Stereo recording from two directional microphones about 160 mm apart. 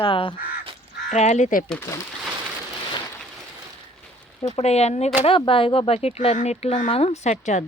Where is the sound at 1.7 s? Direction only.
15° left (ahead or behind).